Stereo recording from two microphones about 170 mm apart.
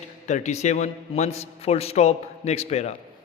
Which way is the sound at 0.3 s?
45° left (ahead or behind).